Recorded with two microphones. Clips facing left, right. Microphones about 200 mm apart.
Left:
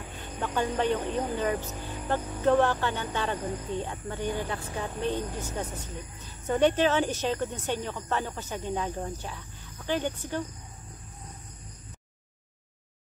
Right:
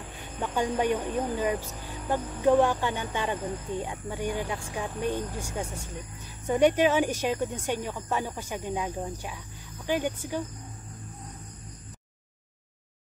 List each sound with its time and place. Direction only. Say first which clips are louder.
0.4 s speech: right 1 dB; 15° right (ahead or behind)